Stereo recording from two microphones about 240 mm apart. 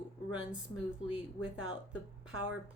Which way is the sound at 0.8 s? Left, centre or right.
Centre.